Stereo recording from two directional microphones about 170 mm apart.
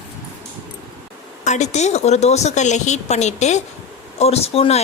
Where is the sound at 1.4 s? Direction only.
45° left (ahead or behind).